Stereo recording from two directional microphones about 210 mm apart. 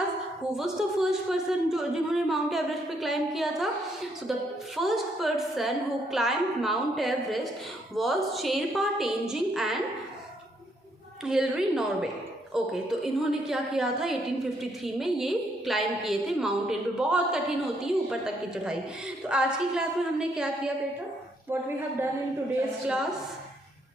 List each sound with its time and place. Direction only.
0.5 s a woman's voice: centre (ahead or behind)
4.8 s a woman's voice: centre (ahead or behind)
11.3 s a woman's voice: 5° right (ahead or behind)